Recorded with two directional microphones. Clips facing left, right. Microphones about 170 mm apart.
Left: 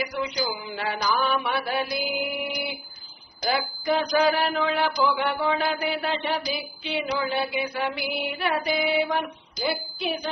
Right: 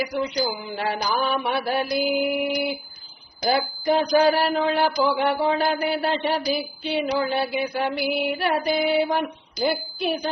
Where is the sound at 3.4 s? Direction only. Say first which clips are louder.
Right 4 dB; 35° right (ahead or behind).